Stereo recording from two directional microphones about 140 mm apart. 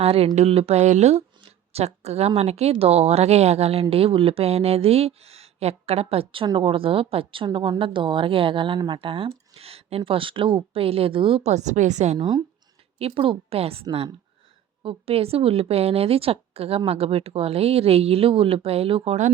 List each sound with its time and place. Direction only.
0.0 s a woman's voice: 45° right (ahead or behind)
13.0 s a woman's voice: 40° right (ahead or behind)
14.8 s a woman's voice: 45° right (ahead or behind)